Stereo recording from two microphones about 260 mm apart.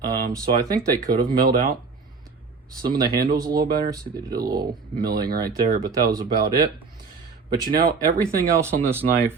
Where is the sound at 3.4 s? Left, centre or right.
Centre.